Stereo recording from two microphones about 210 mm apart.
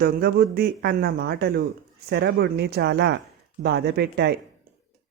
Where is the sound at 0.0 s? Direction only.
50° right (ahead or behind).